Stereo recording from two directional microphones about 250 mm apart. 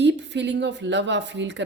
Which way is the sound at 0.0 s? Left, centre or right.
Right.